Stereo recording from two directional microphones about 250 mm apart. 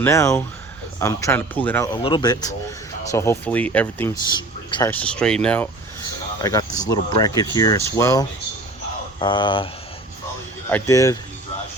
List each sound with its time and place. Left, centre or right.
0.0 s speech: centre
6.4 s speech: centre
10.7 s speech: centre